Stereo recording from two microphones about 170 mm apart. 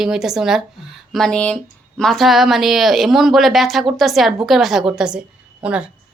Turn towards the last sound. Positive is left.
turn(degrees=-5)  # may be behind; listen again after turning